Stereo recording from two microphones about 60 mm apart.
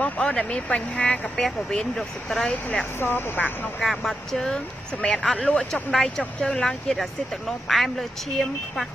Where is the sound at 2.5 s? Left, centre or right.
Left.